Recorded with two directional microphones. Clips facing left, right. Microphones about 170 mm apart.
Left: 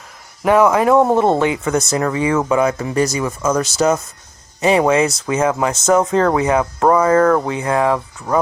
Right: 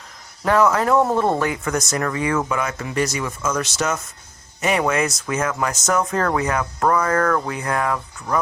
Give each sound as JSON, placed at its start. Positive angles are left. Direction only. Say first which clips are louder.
{"t": 0.4, "sound": "speech", "louder": "left 5 dB", "side_deg": 15}